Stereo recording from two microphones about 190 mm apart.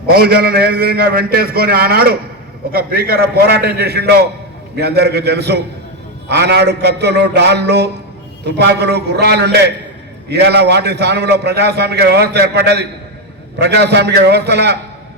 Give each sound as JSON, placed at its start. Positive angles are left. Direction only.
{"t": 0.1, "sound": "a man's voice", "side_deg": -55}